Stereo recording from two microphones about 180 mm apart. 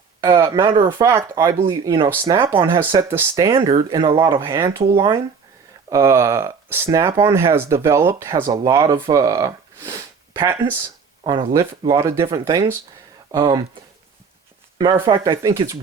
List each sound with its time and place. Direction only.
0.4 s speech: 30° right (ahead or behind)
0.9 s speech: 15° right (ahead or behind)
2.6 s speech: 25° right (ahead or behind)
2.8 s speech: 15° right (ahead or behind)
11.2 s speech: 25° right (ahead or behind)
15.0 s speech: 25° right (ahead or behind)